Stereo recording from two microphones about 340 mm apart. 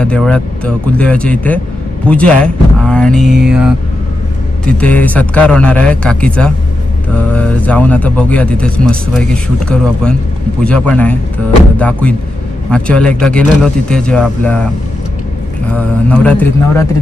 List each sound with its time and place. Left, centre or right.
0.0 s a man's voice: centre
4.6 s a man's voice: centre
15.7 s a man's voice: centre